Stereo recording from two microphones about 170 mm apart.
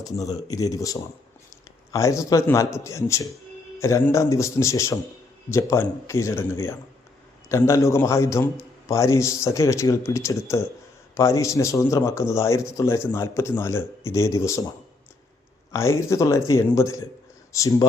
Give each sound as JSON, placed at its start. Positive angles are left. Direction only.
{"t": 0.0, "sound": "a man's voice", "side_deg": 20}
{"t": 15.7, "sound": "a man's voice", "side_deg": 15}